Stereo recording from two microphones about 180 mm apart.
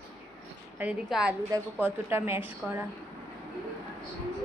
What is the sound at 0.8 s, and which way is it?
A woman's voice, 5° right (ahead or behind).